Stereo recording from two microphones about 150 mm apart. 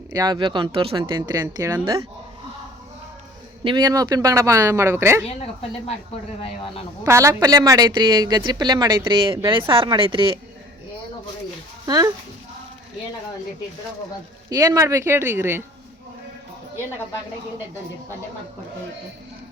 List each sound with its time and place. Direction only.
0.1 s speech: 25° right (ahead or behind)
1.4 s speech: 20° right (ahead or behind)
3.6 s speech: 30° right (ahead or behind)
7.0 s speech: 20° right (ahead or behind); by 10.3 s 35° right (ahead or behind)
11.9 s speech: 25° right (ahead or behind)
14.5 s speech: 25° right (ahead or behind)